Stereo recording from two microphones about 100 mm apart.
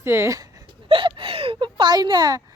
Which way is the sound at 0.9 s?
60° right (ahead or behind).